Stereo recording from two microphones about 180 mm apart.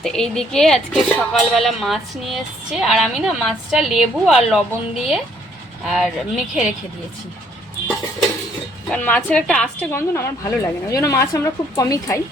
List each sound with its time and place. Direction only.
0.0 s speech: 5° left (ahead or behind)
5.8 s speech: centre (ahead or behind)
8.9 s a woman's voice: 10° left (ahead or behind)